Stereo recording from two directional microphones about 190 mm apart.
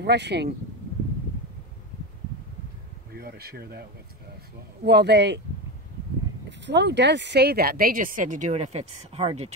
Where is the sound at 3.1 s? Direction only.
55° right (ahead or behind).